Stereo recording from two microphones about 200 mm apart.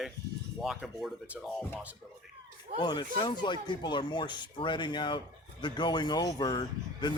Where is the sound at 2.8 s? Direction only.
25° left (ahead or behind).